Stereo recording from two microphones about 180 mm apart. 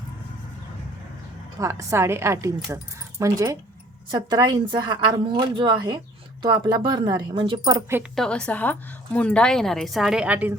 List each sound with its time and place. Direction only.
1.5 s speech: 15° right (ahead or behind)
8.1 s a woman's voice: 5° left (ahead or behind)